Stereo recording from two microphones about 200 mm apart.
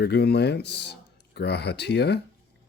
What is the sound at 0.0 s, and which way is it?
Speech, 55° left (ahead or behind).